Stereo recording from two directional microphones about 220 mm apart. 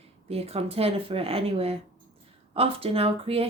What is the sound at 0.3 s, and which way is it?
A woman's voice, 25° right (ahead or behind).